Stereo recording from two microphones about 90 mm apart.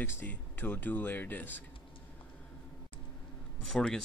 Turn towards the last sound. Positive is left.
turn(degrees=10)  # may be behind; listen again after turning